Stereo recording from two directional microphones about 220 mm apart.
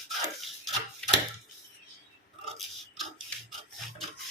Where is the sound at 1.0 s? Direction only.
5° left (ahead or behind).